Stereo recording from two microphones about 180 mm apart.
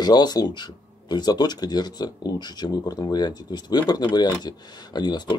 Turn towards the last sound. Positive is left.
turn(degrees=25)  # may be behind; listen again after turning